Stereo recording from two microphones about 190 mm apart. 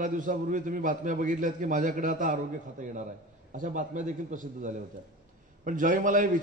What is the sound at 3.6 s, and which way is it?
A man's voice, 40° right (ahead or behind).